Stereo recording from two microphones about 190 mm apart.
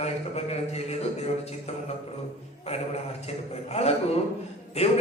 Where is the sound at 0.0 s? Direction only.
35° left (ahead or behind).